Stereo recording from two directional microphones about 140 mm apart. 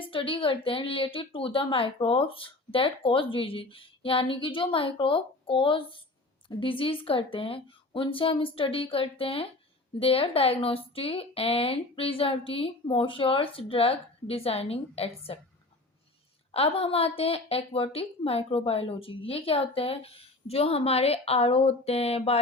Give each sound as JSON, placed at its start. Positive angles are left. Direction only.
{"t": 0.1, "sound": "speech", "side_deg": 40}
{"t": 16.5, "sound": "speech", "side_deg": 45}